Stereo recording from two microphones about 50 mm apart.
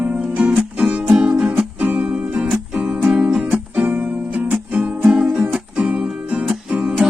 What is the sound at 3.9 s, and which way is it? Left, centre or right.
Music, right.